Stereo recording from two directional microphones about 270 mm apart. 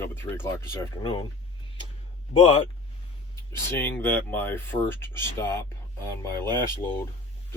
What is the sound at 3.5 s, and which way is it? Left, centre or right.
Speech, centre.